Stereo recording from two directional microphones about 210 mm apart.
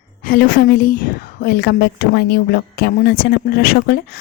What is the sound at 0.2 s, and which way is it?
A woman's voice, 40° left (ahead or behind).